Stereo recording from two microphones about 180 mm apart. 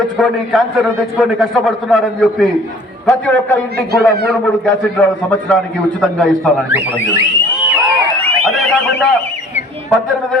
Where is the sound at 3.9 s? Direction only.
60° right (ahead or behind).